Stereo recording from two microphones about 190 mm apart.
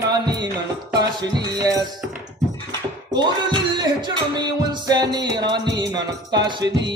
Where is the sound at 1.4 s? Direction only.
20° right (ahead or behind).